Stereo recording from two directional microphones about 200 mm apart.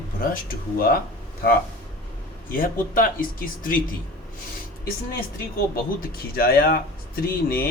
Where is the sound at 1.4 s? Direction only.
50° left (ahead or behind).